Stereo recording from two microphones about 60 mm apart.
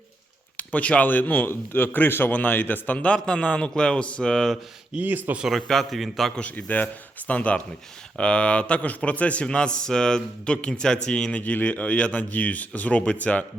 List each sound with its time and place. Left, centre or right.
0.5 s a man's voice: left
4.9 s speech: right
5.5 s a man's voice: centre
6.3 s a man's voice: left